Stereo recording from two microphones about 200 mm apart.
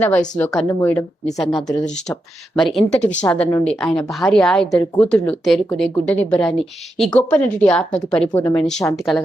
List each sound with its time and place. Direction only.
0.0 s a woman's voice: 10° left (ahead or behind)